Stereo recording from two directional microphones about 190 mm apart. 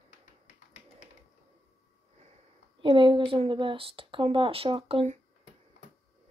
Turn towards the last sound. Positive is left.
turn(degrees=-30)  # may be behind; listen again after turning